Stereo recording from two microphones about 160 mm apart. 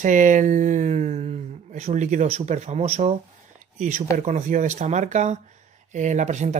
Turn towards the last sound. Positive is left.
turn(degrees=-45)  # may be behind; listen again after turning